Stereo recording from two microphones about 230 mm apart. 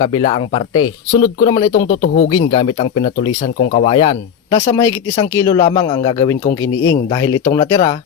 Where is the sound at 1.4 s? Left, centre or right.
Left.